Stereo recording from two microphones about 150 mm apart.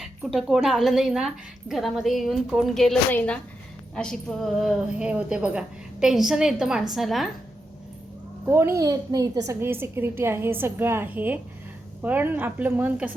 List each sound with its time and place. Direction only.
0.0 s a woman's voice: centre (ahead or behind)
8.4 s a woman's voice: 15° right (ahead or behind)